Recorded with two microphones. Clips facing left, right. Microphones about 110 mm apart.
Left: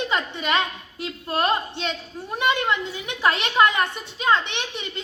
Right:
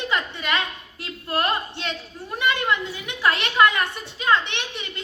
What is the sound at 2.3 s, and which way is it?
A woman's voice, 20° left (ahead or behind).